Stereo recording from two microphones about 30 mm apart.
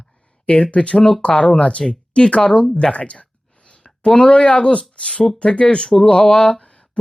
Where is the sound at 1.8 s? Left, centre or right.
Left.